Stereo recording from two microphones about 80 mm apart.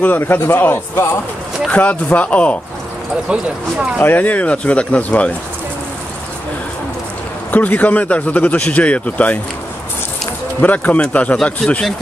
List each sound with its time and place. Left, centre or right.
0.0 s a man's voice: left
4.0 s a man's voice: left
7.5 s a man's voice: centre
10.6 s a man's voice: centre